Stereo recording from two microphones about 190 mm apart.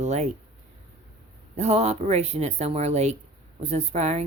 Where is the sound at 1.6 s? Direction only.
35° right (ahead or behind).